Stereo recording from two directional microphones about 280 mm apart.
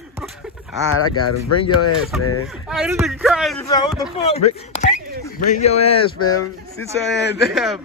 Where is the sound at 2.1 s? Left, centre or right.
Centre.